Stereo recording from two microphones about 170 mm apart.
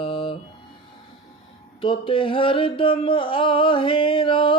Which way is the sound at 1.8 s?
30° left (ahead or behind).